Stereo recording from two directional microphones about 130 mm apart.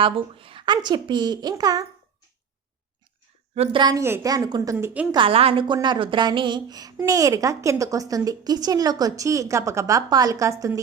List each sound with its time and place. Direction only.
0.0 s a child's voice: 40° right (ahead or behind)
3.5 s a woman's voice: 55° right (ahead or behind)
3.8 s a child's voice: 30° right (ahead or behind)
5.1 s a woman's voice: 45° right (ahead or behind); by 10.5 s 25° right (ahead or behind)